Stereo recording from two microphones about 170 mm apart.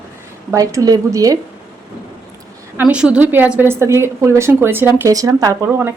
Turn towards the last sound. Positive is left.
turn(degrees=-15)  # may be behind; listen again after turning